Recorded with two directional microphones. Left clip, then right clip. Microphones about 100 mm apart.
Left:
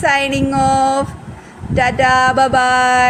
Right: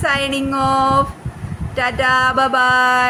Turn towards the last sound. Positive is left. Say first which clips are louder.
# left 2 dB
turn(degrees=25)  # may be behind; listen again after turning